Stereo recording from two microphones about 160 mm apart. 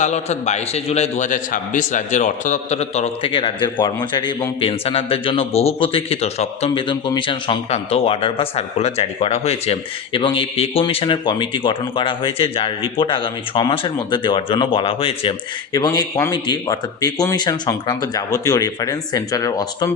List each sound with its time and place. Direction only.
0.0 s a man's voice: 45° left (ahead or behind); by 19.9 s 25° left (ahead or behind)